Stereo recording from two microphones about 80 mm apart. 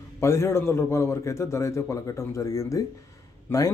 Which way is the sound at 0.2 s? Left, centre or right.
Left.